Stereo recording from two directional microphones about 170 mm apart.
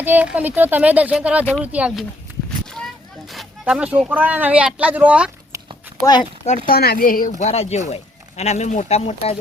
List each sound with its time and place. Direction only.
0.0 s speech: 10° right (ahead or behind)
6.7 s speech: 65° left (ahead or behind); by 9.4 s 35° left (ahead or behind)